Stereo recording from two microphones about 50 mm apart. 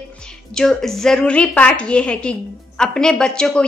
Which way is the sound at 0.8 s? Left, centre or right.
Centre.